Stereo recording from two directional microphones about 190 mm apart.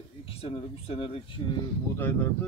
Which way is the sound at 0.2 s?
30° left (ahead or behind).